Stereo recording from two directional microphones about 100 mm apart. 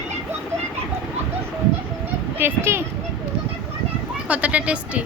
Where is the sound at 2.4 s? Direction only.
25° right (ahead or behind).